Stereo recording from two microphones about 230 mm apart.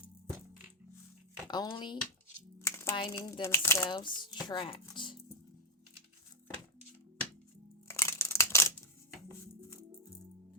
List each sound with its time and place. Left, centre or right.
1.5 s speech: centre
2.6 s a sound: centre
3.0 s speech: centre
7.9 s crushing: centre